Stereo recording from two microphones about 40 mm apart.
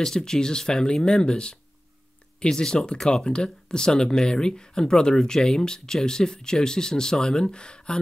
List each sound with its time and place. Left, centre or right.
0.0 s speech: centre